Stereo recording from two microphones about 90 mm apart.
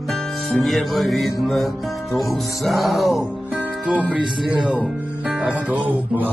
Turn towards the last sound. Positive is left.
turn(degrees=-15)  # may be behind; listen again after turning